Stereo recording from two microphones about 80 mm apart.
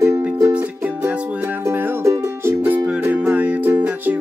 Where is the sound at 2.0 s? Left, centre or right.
Right.